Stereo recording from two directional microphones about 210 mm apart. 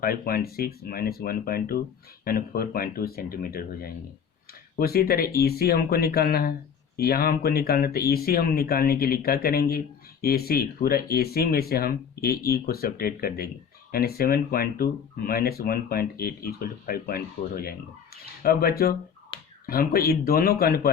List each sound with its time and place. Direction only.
0.0 s speech: 45° left (ahead or behind)
19.3 s finger snapping: 25° left (ahead or behind)
19.6 s speech: 45° left (ahead or behind)